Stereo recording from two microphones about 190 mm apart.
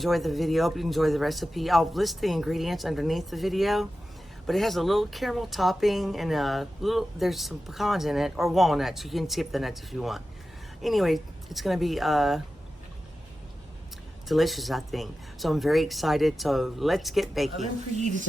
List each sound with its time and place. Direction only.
0.0 s speech: centre (ahead or behind)
14.3 s speech: centre (ahead or behind)
17.9 s speech: 40° right (ahead or behind)